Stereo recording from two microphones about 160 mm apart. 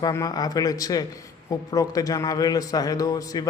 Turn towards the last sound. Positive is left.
turn(degrees=20)  # may be behind; listen again after turning